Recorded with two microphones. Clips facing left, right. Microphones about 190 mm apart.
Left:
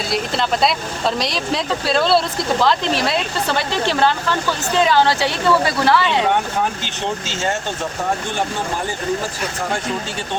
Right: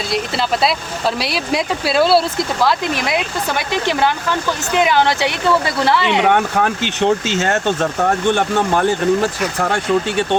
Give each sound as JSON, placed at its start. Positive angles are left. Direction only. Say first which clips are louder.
{"t": 0.1, "sound": "speech", "louder": "right 1 dB", "side_deg": -5}
{"t": 6.2, "sound": "speech", "louder": "right 4 dB", "side_deg": -65}